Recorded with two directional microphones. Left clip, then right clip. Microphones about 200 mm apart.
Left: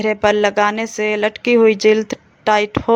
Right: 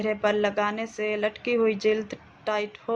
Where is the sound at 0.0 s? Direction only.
50° left (ahead or behind).